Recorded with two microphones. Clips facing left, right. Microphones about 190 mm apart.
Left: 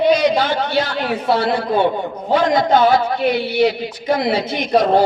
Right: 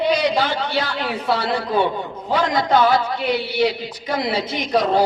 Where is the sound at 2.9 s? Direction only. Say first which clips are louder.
Left 4 dB; 55° left (ahead or behind).